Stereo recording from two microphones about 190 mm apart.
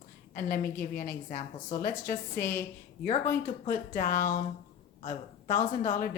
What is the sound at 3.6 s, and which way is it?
A woman's voice, 50° left (ahead or behind).